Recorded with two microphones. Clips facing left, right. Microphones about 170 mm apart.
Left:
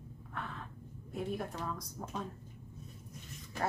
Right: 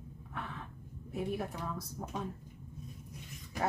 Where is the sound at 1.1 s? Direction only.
5° right (ahead or behind).